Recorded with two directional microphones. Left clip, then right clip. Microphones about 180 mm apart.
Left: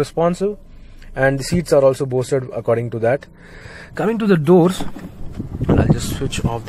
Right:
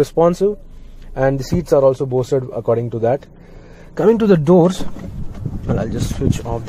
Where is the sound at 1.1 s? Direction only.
5° left (ahead or behind).